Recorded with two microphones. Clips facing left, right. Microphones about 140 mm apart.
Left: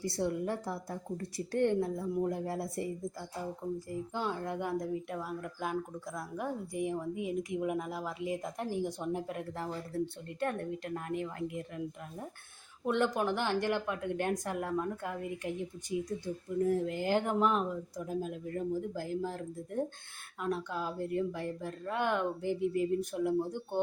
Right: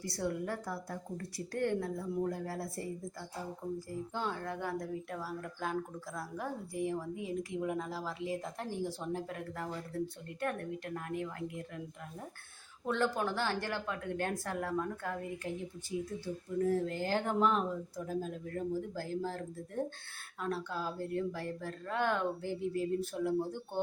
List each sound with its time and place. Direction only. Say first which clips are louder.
0.0 s a woman's voice: left 3 dB; 20° left (ahead or behind)
12.8 s speech: left 2 dB; 15° left (ahead or behind)